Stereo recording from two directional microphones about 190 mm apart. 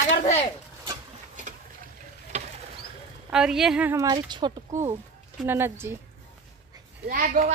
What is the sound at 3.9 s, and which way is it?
Speech, 20° right (ahead or behind).